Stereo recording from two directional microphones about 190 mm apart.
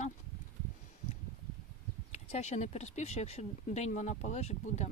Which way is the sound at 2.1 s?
35° left (ahead or behind).